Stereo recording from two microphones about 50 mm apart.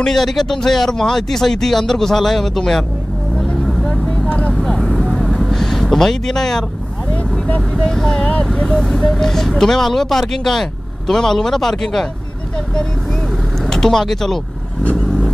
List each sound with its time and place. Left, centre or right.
0.0 s speech: centre
3.6 s vehicle: centre
4.3 s vehicle: left
4.6 s speech: centre
5.0 s vehicle: centre
7.7 s speech: centre
8.7 s speech: centre